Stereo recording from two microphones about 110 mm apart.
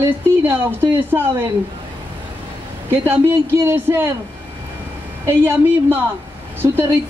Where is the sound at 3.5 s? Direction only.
25° right (ahead or behind).